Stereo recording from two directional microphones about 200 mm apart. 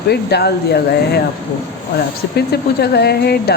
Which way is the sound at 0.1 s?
55° left (ahead or behind).